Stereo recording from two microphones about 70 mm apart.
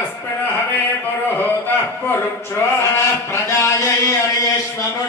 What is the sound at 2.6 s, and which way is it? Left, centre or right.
Chant, left.